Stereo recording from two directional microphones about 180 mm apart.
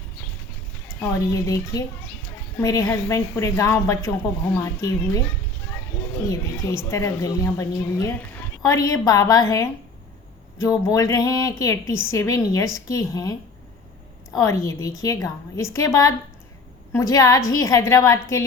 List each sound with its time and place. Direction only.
0.9 s a woman's voice: 15° left (ahead or behind)
6.2 s a woman's voice: 15° left (ahead or behind)
14.3 s a woman's voice: 15° left (ahead or behind)